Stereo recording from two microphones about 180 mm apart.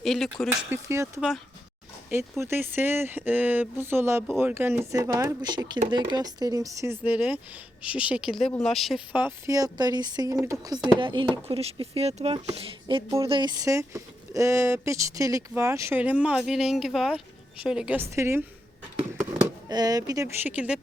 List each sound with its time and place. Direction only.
0.0 s speech: centre (ahead or behind)
0.7 s speech: 15° right (ahead or behind)
2.4 s speech: 10° right (ahead or behind)
9.1 s speech: 15° right (ahead or behind)
19.6 s speech: 20° right (ahead or behind)